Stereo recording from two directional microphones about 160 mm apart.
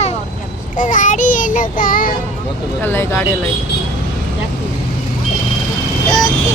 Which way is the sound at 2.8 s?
15° left (ahead or behind).